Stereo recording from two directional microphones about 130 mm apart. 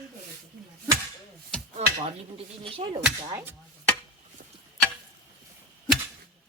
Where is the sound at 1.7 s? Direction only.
50° right (ahead or behind).